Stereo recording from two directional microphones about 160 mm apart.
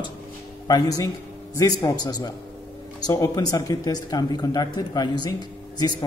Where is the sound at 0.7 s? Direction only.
25° left (ahead or behind).